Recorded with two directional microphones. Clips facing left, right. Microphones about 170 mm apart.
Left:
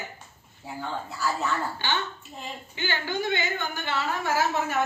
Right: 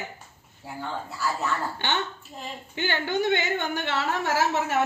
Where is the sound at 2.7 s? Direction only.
60° right (ahead or behind).